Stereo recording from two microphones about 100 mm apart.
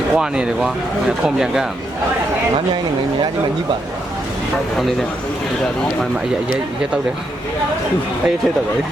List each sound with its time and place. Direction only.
0.1 s speech: 5° right (ahead or behind)